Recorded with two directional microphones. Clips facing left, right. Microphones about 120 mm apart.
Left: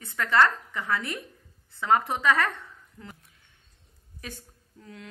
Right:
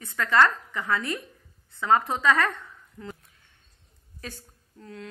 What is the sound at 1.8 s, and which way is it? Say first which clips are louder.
Speech: right 1 dB; 25° right (ahead or behind).